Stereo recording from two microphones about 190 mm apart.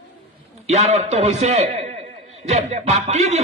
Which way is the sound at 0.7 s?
35° right (ahead or behind).